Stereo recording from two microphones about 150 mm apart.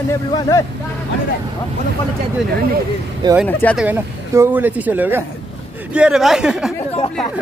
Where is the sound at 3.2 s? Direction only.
30° right (ahead or behind).